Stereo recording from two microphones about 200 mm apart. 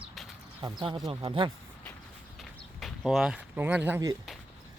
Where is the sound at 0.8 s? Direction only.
25° right (ahead or behind).